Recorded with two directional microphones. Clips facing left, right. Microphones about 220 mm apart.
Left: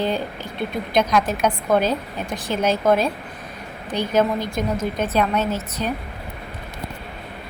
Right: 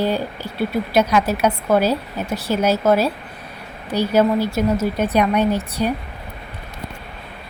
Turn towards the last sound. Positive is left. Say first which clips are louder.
# right 5 dB
turn(degrees=-15)  # may be behind; listen again after turning